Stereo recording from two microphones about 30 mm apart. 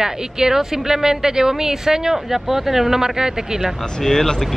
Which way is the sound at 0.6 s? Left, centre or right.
Centre.